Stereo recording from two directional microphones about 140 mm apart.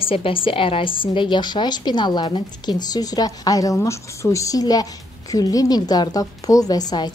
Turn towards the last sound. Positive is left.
turn(degrees=30)  # may be behind; listen again after turning